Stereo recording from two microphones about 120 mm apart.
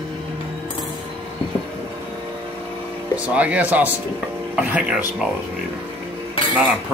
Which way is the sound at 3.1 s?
10° right (ahead or behind).